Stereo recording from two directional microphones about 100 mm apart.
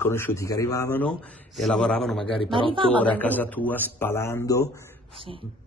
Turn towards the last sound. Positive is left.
turn(degrees=35)  # may be behind; listen again after turning